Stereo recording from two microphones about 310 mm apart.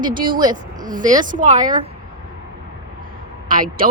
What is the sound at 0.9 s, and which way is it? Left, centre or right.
Speech, right.